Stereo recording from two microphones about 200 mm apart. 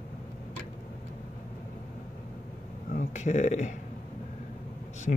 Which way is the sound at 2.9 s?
40° left (ahead or behind).